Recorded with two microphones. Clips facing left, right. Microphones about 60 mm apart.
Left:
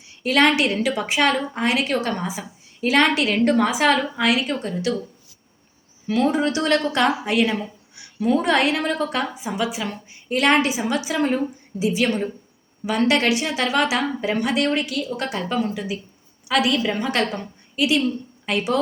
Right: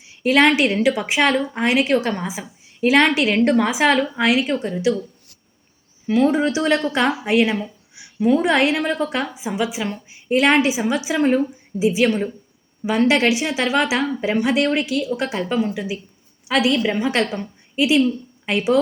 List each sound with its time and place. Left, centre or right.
0.2 s a woman's voice: right
6.1 s a woman's voice: centre